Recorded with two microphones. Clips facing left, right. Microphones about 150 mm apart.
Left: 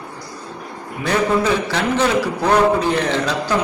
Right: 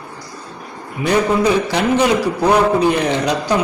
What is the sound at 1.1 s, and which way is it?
A man's voice, 15° right (ahead or behind).